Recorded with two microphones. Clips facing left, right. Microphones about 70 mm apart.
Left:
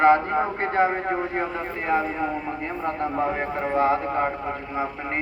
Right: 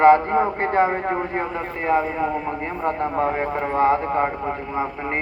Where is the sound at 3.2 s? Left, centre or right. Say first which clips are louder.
Right 3 dB; right.